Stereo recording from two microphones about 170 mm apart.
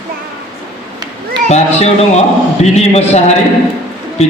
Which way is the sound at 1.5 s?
40° left (ahead or behind).